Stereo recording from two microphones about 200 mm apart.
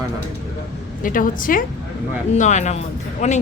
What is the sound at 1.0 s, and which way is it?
A woman's voice, 45° left (ahead or behind).